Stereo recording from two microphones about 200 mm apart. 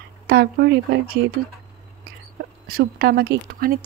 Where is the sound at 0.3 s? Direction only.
55° right (ahead or behind).